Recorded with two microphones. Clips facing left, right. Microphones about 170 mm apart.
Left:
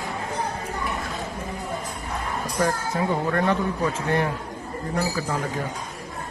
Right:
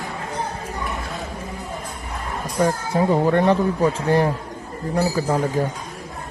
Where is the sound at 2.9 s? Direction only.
30° right (ahead or behind).